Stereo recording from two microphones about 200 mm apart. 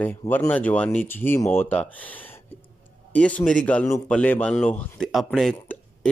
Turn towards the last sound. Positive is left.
turn(degrees=5)  # may be behind; listen again after turning